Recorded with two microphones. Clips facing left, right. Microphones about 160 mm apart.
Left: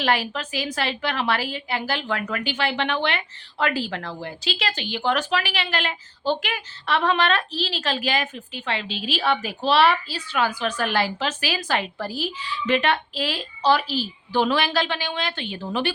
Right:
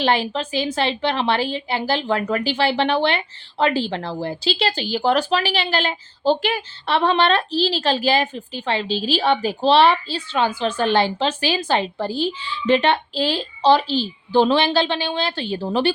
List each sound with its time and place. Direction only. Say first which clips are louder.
0.0 s a woman's voice: right 4 dB; 30° right (ahead or behind)